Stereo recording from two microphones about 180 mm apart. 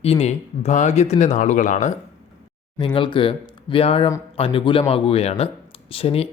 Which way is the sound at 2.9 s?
25° left (ahead or behind).